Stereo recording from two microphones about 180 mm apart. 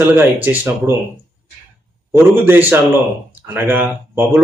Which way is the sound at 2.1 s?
10° right (ahead or behind).